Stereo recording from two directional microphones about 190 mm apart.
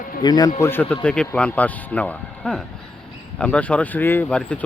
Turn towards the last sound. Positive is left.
turn(degrees=5)  # may be behind; listen again after turning